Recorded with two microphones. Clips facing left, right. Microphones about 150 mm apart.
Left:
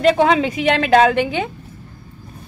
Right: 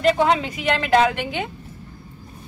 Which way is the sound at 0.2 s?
85° left.